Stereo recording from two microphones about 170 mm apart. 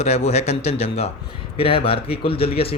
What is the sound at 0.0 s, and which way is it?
Speech, 40° left (ahead or behind).